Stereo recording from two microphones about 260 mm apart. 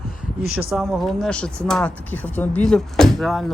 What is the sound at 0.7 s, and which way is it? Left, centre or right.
Speech, centre.